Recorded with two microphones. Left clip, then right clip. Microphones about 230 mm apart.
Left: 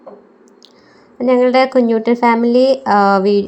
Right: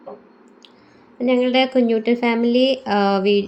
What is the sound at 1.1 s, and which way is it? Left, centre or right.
A woman's voice, centre.